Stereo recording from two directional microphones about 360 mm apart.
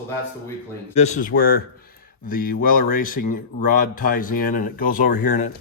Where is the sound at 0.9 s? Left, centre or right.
Centre.